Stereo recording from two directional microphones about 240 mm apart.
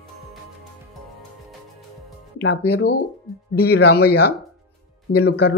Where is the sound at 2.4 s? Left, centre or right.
Left.